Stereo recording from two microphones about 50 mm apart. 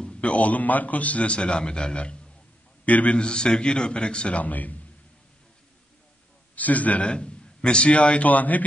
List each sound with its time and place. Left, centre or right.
0.0 s a man's voice: left
3.2 s a man's voice: centre
4.4 s a man's voice: left
6.5 s a man's voice: left